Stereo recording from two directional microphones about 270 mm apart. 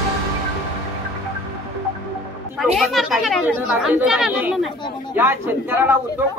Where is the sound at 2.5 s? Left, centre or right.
Centre.